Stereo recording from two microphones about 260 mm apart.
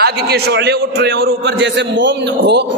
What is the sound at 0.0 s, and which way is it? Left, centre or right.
A man's voice, right.